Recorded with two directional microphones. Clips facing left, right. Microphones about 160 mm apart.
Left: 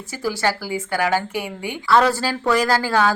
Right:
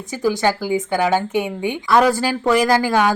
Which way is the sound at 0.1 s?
20° right (ahead or behind).